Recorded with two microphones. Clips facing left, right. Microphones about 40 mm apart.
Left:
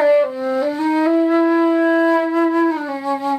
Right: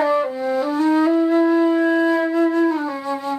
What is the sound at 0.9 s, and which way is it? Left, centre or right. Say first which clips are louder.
Flute: left 1 dB; centre.